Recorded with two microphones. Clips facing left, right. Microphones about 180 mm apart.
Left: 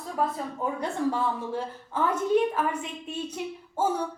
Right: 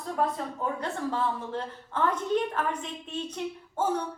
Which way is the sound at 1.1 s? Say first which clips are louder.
Even; 10° left (ahead or behind).